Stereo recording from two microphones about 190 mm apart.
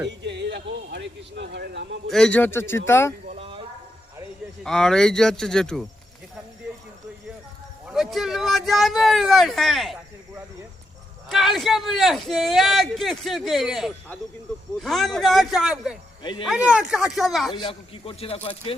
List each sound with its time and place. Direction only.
0.1 s speech: 65° right (ahead or behind)
2.0 s a man's voice: 5° left (ahead or behind)
3.3 s a sound: 30° right (ahead or behind)
4.6 s a man's voice: 5° left (ahead or behind)
7.9 s a man's voice: centre (ahead or behind)
11.3 s a man's voice: centre (ahead or behind)
17.5 s speech: 25° left (ahead or behind)